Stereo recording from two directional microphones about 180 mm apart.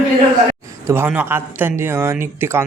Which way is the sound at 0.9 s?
10° right (ahead or behind).